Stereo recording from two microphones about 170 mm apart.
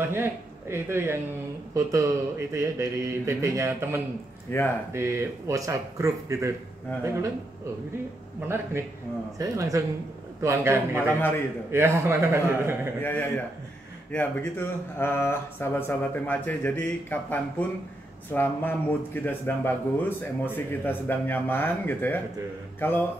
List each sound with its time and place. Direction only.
0.0 s speech: 15° right (ahead or behind)
4.5 s speech: 15° left (ahead or behind)
4.9 s speech: 15° right (ahead or behind)
9.4 s speech: 20° right (ahead or behind)
11.1 s speech: 10° left (ahead or behind)
11.7 s speech: 15° right (ahead or behind)
13.0 s speech: 10° left (ahead or behind)